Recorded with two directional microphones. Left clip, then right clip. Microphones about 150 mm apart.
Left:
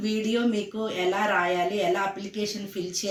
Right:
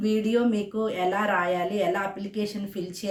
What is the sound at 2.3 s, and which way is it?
Speech, 35° right (ahead or behind).